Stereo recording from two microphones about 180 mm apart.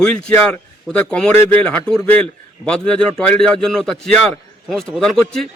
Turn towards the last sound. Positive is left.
turn(degrees=5)  # may be behind; listen again after turning